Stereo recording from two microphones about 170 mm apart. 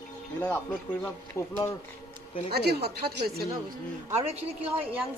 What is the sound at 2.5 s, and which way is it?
Speech, 70° right (ahead or behind).